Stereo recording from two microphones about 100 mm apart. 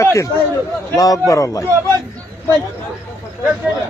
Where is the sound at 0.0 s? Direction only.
30° left (ahead or behind).